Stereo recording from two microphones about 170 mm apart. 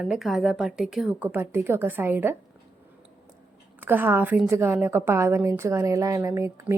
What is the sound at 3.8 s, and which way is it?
A woman's voice, 10° right (ahead or behind).